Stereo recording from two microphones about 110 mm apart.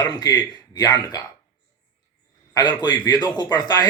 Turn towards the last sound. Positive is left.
turn(degrees=40)  # may be behind; listen again after turning